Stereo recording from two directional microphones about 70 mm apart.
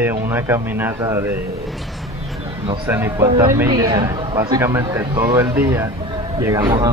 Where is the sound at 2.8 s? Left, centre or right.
Right.